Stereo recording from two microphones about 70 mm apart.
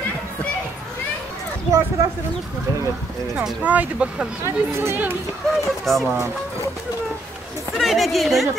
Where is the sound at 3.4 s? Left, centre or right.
Centre.